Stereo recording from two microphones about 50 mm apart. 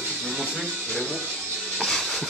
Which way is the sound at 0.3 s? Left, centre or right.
Centre.